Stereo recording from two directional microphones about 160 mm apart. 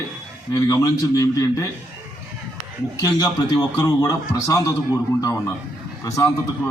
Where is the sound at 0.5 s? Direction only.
20° left (ahead or behind).